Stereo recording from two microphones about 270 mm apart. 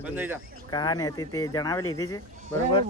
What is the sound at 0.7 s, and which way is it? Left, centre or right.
Speech, centre.